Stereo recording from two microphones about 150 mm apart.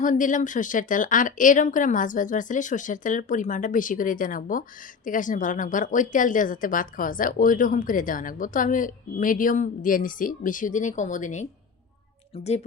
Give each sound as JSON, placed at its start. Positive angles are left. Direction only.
{"t": 0.0, "sound": "speech", "side_deg": 60}
{"t": 12.3, "sound": "speech", "side_deg": 45}